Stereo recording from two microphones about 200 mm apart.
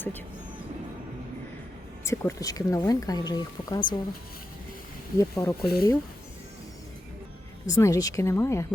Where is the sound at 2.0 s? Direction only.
15° left (ahead or behind).